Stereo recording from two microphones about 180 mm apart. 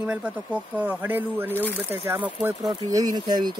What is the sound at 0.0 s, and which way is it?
Speech, 5° right (ahead or behind).